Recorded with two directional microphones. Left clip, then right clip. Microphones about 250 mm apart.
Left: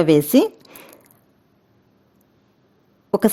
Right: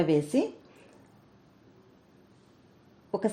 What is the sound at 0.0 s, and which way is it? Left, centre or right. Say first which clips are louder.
Speech: left 11 dB; left.